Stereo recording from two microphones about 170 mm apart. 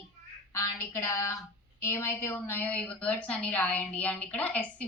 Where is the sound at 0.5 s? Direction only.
15° left (ahead or behind).